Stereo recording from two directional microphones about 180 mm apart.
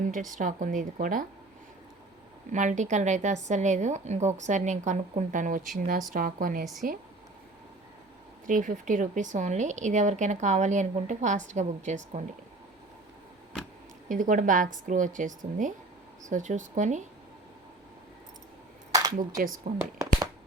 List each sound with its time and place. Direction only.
0.0 s a woman's voice: 45° right (ahead or behind)
2.5 s a woman's voice: 45° right (ahead or behind)
8.4 s a woman's voice: 45° right (ahead or behind)
14.1 s a woman's voice: 45° right (ahead or behind)
19.8 s shuffling cards: 15° right (ahead or behind)